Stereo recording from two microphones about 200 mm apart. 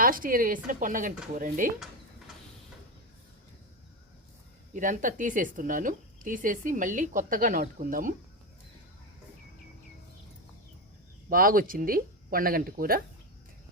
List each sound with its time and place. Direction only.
0.0 s a woman's voice: 45° right (ahead or behind)
4.7 s a woman's voice: 40° right (ahead or behind)
11.3 s speech: 45° right (ahead or behind)